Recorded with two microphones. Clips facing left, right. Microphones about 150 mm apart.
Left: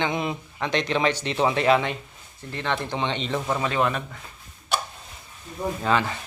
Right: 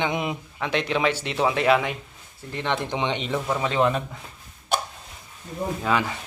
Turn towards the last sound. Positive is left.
turn(degrees=-10)  # may be behind; listen again after turning